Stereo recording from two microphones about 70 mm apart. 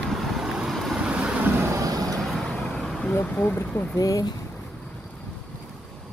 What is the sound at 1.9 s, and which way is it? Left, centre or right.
Vehicle, right.